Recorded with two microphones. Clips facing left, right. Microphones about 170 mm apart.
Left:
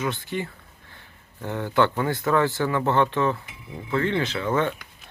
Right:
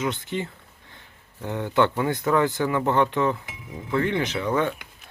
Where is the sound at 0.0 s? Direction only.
20° right (ahead or behind).